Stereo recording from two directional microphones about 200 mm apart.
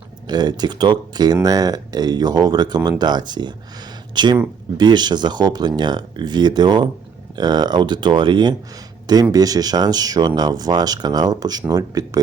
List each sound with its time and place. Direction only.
0.3 s speech: 20° right (ahead or behind)